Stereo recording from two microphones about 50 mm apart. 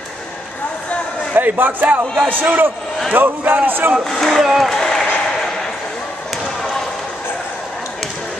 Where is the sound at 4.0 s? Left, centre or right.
Centre.